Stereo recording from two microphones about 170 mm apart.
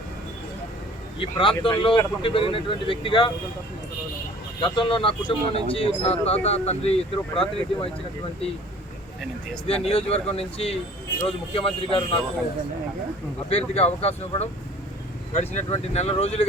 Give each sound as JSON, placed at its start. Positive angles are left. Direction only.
{"t": 1.2, "sound": "speech", "side_deg": 30}
{"t": 4.6, "sound": "speech", "side_deg": 30}
{"t": 9.9, "sound": "speech", "side_deg": 35}
{"t": 13.5, "sound": "speech", "side_deg": 35}